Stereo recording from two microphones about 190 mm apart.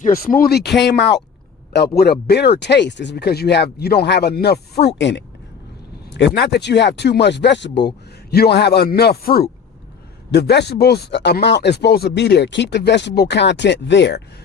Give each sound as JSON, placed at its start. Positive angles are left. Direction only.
{"t": 0.2, "sound": "speech", "side_deg": 50}